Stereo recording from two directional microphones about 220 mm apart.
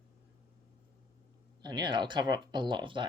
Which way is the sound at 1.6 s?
20° right (ahead or behind).